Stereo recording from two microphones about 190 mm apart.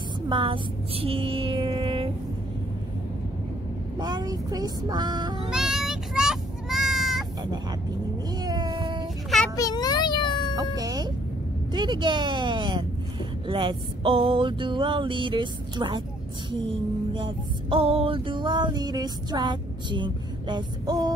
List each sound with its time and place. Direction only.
0.3 s music: 25° right (ahead or behind)
4.0 s music: 20° right (ahead or behind)
5.5 s sheep: centre (ahead or behind)
8.4 s a sound: 20° right (ahead or behind)
9.6 s a sound: 20° left (ahead or behind)
10.5 s chicken: 20° right (ahead or behind)
11.7 s music: 25° right (ahead or behind)
17.1 s music: 25° right (ahead or behind)